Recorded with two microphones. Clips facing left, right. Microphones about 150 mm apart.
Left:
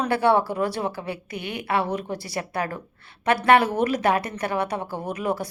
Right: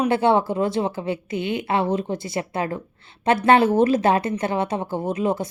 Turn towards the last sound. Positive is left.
turn(degrees=-25)  # may be behind; listen again after turning